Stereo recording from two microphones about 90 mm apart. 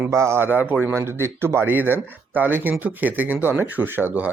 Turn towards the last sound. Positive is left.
turn(degrees=-20)  # may be behind; listen again after turning